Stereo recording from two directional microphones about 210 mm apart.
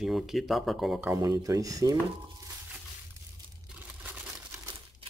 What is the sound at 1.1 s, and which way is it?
Speech, 15° right (ahead or behind).